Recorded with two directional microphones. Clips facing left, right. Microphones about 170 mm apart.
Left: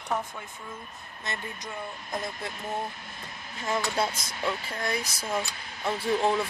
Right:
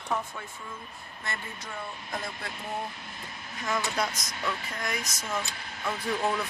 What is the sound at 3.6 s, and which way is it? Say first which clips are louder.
Speech: left 2 dB; 30° left (ahead or behind).